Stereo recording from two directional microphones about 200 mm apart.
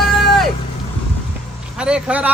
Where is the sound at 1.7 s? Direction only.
5° right (ahead or behind).